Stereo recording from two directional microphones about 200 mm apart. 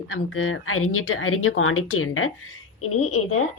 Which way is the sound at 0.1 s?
90° left.